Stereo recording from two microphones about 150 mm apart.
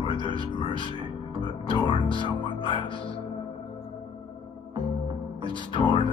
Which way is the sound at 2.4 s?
30° left (ahead or behind).